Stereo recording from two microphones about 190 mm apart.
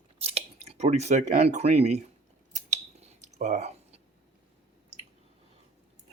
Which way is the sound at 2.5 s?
40° right (ahead or behind).